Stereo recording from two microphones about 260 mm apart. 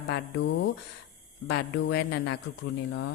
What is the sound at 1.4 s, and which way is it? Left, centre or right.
Speech, left.